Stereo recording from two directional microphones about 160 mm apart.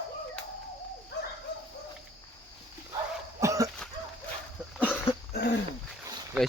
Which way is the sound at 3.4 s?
20° right (ahead or behind).